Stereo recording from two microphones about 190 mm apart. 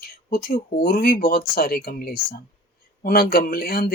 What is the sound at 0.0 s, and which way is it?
Speech, 50° left (ahead or behind).